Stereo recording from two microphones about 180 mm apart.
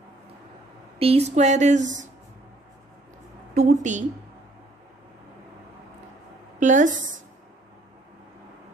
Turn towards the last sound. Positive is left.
turn(degrees=-45)  # may be behind; listen again after turning